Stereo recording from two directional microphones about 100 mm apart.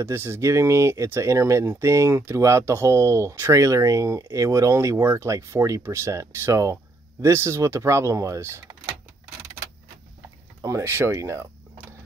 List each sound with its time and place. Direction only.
0.0 s speech: 25° right (ahead or behind)
10.6 s speech: 30° right (ahead or behind)